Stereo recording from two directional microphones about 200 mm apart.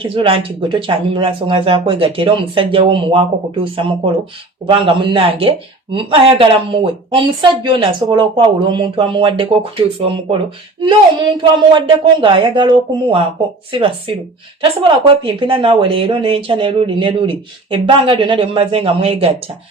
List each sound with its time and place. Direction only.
0.0 s speech: 25° right (ahead or behind)